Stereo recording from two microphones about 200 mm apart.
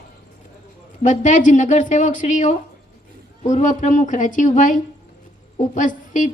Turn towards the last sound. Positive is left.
turn(degrees=40)  # may be behind; listen again after turning